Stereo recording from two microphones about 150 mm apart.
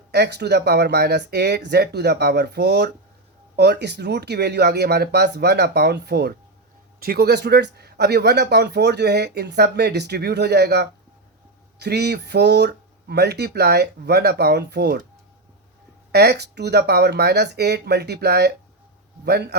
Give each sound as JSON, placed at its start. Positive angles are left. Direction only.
{"t": 0.1, "sound": "speech", "side_deg": -90}
{"t": 16.1, "sound": "speech", "side_deg": -90}